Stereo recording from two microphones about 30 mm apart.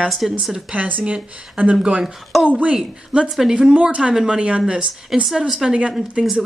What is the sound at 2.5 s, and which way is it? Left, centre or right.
Speech, right.